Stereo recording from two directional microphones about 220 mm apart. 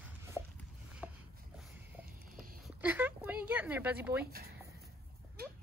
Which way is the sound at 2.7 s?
10° right (ahead or behind).